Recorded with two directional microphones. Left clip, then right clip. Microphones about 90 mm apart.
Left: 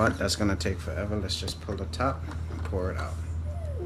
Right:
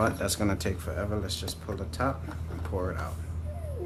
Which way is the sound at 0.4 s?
25° right (ahead or behind).